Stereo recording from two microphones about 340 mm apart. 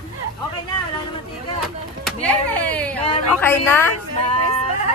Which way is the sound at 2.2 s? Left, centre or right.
Centre.